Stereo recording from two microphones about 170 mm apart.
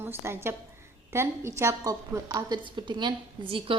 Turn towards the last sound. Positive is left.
turn(degrees=-30)  # may be behind; listen again after turning